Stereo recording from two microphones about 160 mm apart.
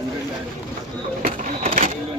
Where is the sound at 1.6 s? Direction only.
45° right (ahead or behind).